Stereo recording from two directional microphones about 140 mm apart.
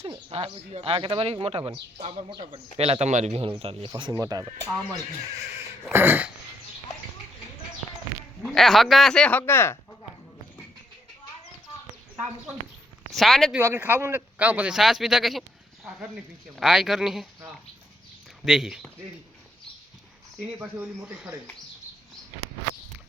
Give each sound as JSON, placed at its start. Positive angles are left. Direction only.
{"t": 0.0, "sound": "speech", "side_deg": -40}
{"t": 5.9, "sound": "speech", "side_deg": -15}
{"t": 8.4, "sound": "speech", "side_deg": 0}
{"t": 12.1, "sound": "speech", "side_deg": -5}
{"t": 13.6, "sound": "speech", "side_deg": -15}
{"t": 18.4, "sound": "speech", "side_deg": -5}
{"t": 20.6, "sound": "speech", "side_deg": -10}